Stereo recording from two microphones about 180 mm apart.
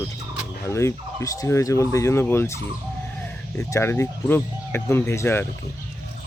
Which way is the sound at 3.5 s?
15° left (ahead or behind).